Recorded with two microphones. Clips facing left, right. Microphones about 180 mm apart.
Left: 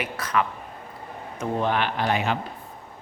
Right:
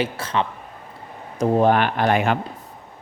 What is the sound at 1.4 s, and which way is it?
Speech, 45° right (ahead or behind).